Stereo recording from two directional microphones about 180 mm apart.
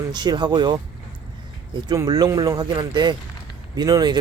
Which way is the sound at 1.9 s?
20° right (ahead or behind).